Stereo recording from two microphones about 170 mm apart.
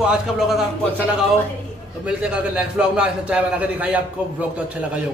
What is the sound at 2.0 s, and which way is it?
A man's voice, 5° right (ahead or behind).